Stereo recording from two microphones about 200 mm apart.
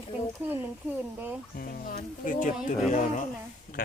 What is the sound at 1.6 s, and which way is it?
Speech, 45° left (ahead or behind).